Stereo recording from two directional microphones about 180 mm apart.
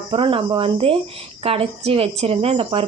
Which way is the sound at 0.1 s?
30° right (ahead or behind).